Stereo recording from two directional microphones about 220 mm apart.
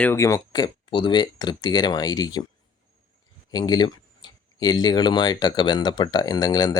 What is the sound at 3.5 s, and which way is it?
Speech, 20° left (ahead or behind).